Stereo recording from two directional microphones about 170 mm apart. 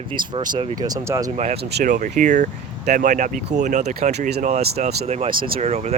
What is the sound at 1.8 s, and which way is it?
Speech, 50° right (ahead or behind).